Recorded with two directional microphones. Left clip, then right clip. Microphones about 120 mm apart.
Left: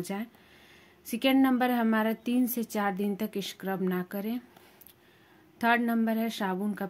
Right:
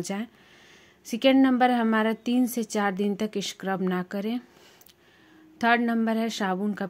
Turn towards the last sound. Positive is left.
turn(degrees=-40)  # may be behind; listen again after turning